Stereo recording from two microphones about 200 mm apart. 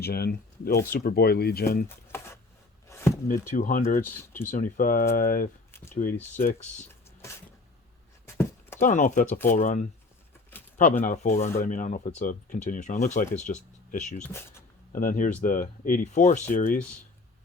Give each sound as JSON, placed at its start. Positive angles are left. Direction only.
{"t": 0.0, "sound": "speech", "side_deg": 50}
{"t": 2.8, "sound": "chopping", "side_deg": 15}
{"t": 3.5, "sound": "speech", "side_deg": 40}
{"t": 4.0, "sound": "speech", "side_deg": 10}
{"t": 4.5, "sound": "speech", "side_deg": 45}
{"t": 6.1, "sound": "speech", "side_deg": 10}
{"t": 6.4, "sound": "speech", "side_deg": 45}
{"t": 8.8, "sound": "speech", "side_deg": 40}
{"t": 14.3, "sound": "speech", "side_deg": 10}
{"t": 14.9, "sound": "speech", "side_deg": 40}